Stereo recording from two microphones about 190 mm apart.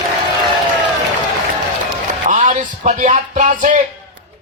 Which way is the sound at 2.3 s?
40° right (ahead or behind).